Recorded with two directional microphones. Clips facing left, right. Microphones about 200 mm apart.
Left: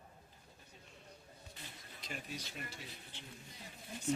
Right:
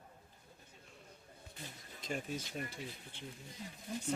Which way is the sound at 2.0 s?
45° right (ahead or behind).